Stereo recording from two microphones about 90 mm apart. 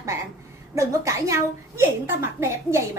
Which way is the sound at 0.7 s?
35° right (ahead or behind).